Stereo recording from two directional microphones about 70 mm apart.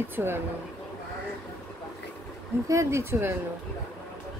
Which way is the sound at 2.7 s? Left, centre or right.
Right.